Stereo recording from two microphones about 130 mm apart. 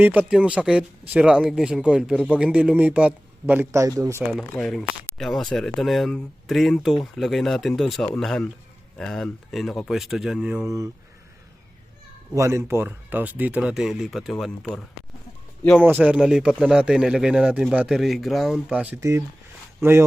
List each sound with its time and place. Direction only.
0.0 s speech: 10° right (ahead or behind)
4.3 s speech: centre (ahead or behind)
12.3 s speech: 20° right (ahead or behind); by 14.8 s 5° left (ahead or behind)
15.8 s speech: 10° right (ahead or behind)
18.9 s speech: 25° right (ahead or behind)